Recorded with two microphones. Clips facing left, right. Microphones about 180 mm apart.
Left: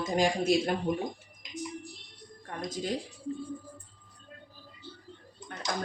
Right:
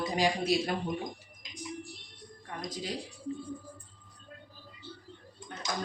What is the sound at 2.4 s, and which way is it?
Speech, 45° left (ahead or behind).